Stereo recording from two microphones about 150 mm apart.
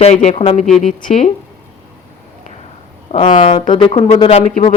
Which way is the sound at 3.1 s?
45° left (ahead or behind).